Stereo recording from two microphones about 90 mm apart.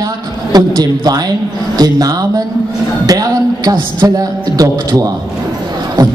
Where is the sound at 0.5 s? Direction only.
45° right (ahead or behind).